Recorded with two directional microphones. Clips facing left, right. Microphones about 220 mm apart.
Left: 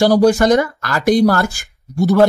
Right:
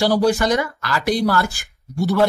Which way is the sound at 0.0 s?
45° left (ahead or behind).